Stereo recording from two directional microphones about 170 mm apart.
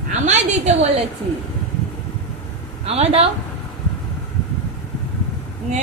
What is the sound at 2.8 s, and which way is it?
Speech, 35° right (ahead or behind).